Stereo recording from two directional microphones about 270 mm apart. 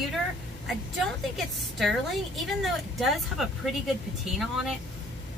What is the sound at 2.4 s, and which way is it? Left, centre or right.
Speech, centre.